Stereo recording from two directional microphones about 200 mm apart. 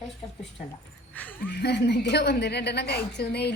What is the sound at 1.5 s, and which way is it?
A woman's voice, 55° left (ahead or behind).